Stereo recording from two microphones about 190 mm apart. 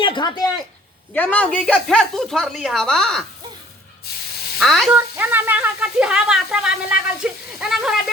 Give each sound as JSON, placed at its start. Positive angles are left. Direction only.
{"t": 0.0, "sound": "speech", "side_deg": 25}
{"t": 1.1, "sound": "speech", "side_deg": 10}
{"t": 4.6, "sound": "speech", "side_deg": 0}
{"t": 4.9, "sound": "speech", "side_deg": -10}